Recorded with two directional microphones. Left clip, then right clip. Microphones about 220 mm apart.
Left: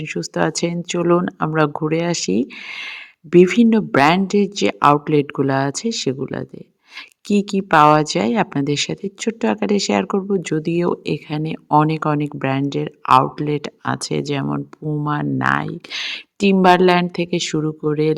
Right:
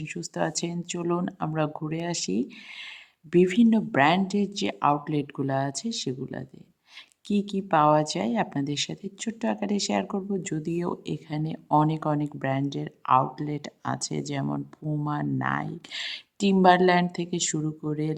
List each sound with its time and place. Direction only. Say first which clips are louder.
0.0 s speech: left 9 dB; 20° left (ahead or behind)